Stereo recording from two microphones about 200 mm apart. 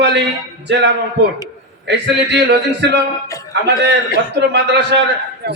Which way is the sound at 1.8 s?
60° right (ahead or behind).